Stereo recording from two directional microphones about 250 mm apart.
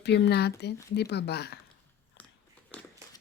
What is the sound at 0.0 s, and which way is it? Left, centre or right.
Speech, left.